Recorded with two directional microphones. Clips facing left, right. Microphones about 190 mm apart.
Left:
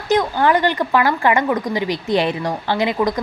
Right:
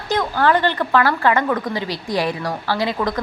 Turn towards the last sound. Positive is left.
turn(degrees=15)  # may be behind; listen again after turning